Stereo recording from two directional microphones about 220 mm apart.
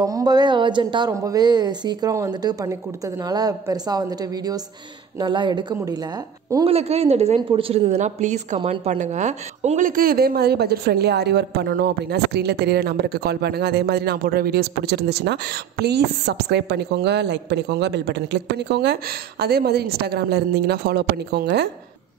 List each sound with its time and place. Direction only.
0.0 s a woman's voice: 15° right (ahead or behind); by 21.6 s 50° right (ahead or behind)